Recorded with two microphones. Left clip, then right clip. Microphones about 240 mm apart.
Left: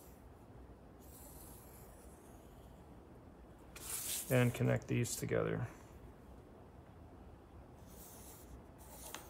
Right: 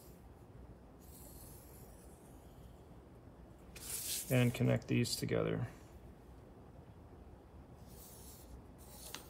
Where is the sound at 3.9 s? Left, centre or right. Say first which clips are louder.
Left 1 dB; centre.